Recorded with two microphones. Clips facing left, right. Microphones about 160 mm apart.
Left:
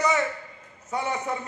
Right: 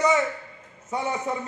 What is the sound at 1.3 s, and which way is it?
Speech, 25° right (ahead or behind).